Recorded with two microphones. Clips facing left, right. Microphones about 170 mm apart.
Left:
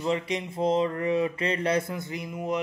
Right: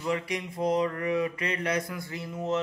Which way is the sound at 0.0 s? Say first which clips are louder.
Left 3 dB; 25° left (ahead or behind).